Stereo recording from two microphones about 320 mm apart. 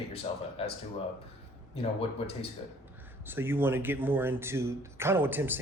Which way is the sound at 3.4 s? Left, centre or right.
Centre.